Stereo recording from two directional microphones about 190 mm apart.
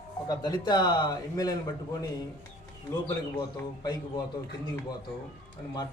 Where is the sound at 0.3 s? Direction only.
20° left (ahead or behind).